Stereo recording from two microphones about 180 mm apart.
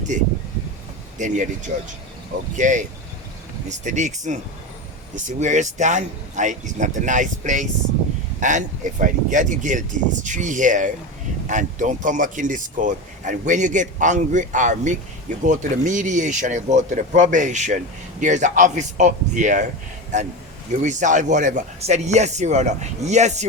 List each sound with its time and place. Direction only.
0.1 s speech: 45° right (ahead or behind)